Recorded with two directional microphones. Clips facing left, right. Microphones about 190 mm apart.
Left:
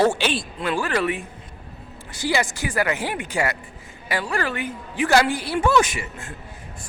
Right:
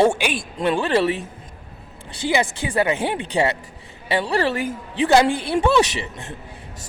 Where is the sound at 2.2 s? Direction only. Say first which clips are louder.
Right 2 dB; 20° right (ahead or behind).